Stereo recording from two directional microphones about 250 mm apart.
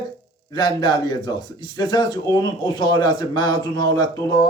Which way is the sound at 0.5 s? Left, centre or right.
Centre.